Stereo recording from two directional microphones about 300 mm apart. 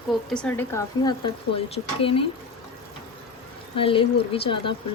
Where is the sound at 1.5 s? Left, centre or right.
Centre.